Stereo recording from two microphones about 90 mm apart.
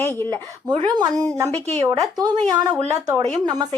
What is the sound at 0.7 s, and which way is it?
Speech, 55° right (ahead or behind).